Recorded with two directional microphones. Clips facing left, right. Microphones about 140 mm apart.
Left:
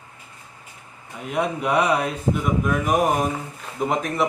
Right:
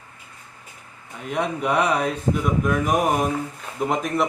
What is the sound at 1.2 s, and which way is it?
Speech, 5° left (ahead or behind).